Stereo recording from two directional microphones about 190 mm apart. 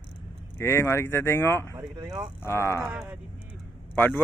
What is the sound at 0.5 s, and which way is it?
Speech, 15° left (ahead or behind).